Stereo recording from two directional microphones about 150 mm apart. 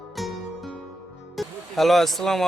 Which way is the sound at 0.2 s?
Centre (ahead or behind).